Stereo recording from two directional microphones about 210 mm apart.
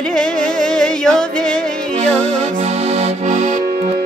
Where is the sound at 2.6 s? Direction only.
30° right (ahead or behind).